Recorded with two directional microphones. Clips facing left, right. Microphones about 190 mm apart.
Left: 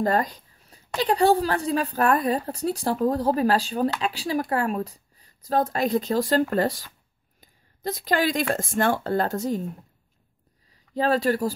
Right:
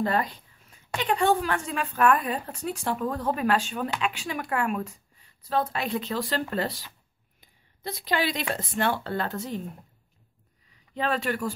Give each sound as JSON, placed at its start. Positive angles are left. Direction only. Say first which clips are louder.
{"t": 0.0, "sound": "a woman's voice", "louder": "left 3 dB", "side_deg": 40}
{"t": 11.0, "sound": "a woman's voice", "louder": "left 6 dB", "side_deg": 35}